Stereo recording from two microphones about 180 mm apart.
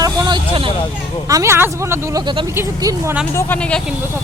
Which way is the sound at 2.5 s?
15° right (ahead or behind).